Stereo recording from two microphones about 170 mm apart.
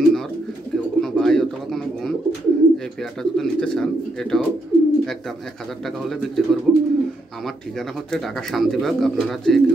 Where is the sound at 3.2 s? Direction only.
5° left (ahead or behind).